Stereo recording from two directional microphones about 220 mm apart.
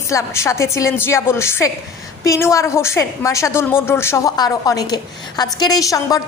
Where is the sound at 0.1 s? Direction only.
15° left (ahead or behind).